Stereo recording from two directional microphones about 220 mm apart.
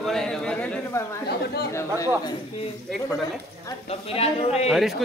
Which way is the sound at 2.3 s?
25° left (ahead or behind).